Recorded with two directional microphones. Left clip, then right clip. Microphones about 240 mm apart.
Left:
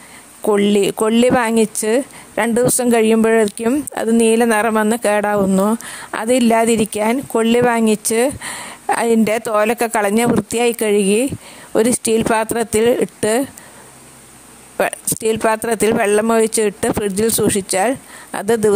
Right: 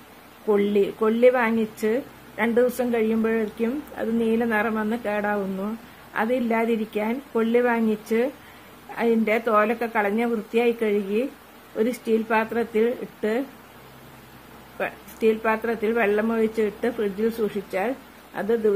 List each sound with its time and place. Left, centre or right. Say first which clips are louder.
0.5 s speech: left 6 dB; left
14.8 s speech: left 7 dB; left